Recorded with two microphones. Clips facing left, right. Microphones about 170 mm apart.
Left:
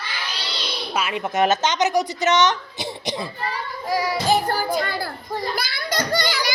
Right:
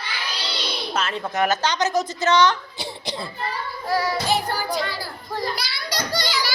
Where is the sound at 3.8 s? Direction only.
15° left (ahead or behind).